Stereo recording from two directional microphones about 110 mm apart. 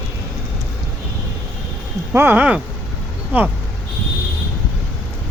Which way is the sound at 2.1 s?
20° right (ahead or behind).